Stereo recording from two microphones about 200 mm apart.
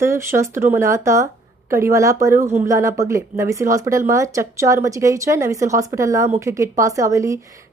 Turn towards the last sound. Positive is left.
turn(degrees=-15)  # may be behind; listen again after turning